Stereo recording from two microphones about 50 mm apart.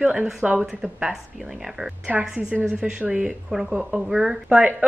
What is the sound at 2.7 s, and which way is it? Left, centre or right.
A woman's voice, right.